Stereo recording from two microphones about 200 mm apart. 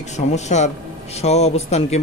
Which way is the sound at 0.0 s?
35° left (ahead or behind).